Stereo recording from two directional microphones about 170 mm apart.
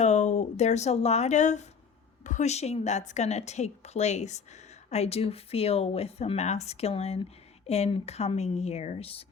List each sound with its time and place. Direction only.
0.0 s speech: 45° left (ahead or behind)